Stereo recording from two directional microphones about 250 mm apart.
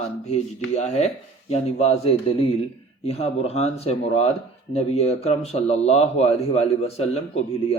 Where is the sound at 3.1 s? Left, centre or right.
Left.